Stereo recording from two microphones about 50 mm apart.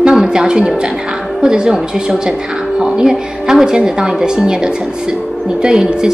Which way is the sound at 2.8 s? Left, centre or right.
Centre.